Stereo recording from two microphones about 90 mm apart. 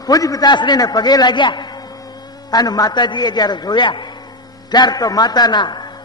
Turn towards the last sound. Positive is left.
turn(degrees=55)  # may be behind; listen again after turning